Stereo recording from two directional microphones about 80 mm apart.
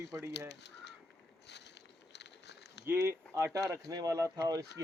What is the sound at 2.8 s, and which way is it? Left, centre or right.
Speech, right.